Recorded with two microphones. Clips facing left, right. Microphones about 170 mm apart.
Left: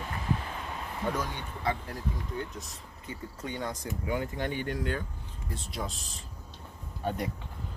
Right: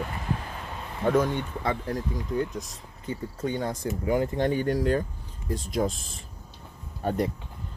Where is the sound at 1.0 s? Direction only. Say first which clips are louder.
Right 10 dB; 55° right (ahead or behind).